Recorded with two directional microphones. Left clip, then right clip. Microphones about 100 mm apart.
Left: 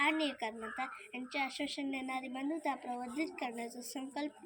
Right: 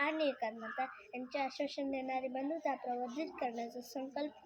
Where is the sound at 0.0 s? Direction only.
35° right (ahead or behind).